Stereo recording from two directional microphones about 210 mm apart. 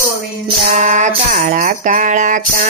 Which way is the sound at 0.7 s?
35° right (ahead or behind).